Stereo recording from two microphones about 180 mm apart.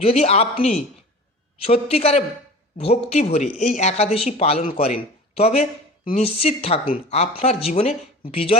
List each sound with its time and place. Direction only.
0.0 s speech: 35° left (ahead or behind)